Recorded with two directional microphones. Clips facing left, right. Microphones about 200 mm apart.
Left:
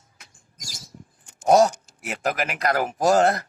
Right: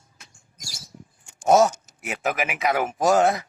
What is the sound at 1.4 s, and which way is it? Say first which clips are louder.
A man's voice: left 1 dB; 5° right (ahead or behind).